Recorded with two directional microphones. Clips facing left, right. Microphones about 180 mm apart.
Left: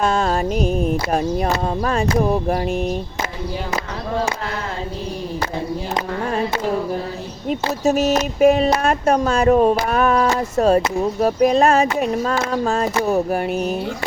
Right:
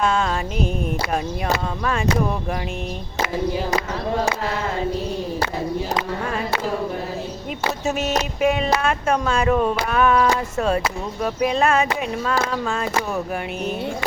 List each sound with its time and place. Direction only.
0.0 s speech: 40° left (ahead or behind)
7.9 s speech: 40° left (ahead or behind)